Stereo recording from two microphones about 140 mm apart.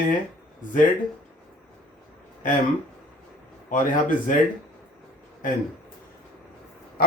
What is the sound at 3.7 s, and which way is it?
Speech, 70° left (ahead or behind).